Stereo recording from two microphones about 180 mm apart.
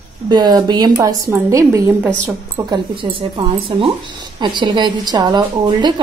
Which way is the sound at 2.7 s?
30° right (ahead or behind).